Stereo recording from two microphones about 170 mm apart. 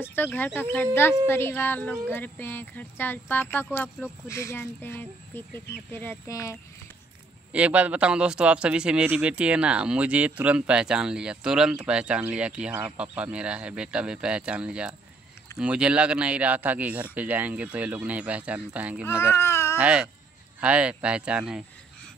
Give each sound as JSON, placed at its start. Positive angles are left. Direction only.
{"t": 0.1, "sound": "speech", "side_deg": 10}
{"t": 7.5, "sound": "a man's voice", "side_deg": -10}
{"t": 19.0, "sound": "speech", "side_deg": 15}
{"t": 19.8, "sound": "a man's voice", "side_deg": -5}